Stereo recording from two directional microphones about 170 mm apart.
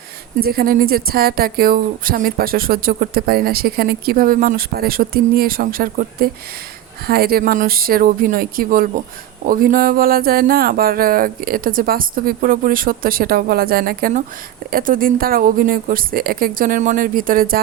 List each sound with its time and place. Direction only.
0.3 s speech: 60° right (ahead or behind)